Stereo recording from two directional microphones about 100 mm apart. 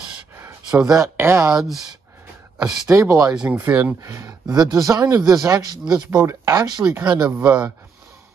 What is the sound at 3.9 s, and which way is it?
Speech, 30° right (ahead or behind).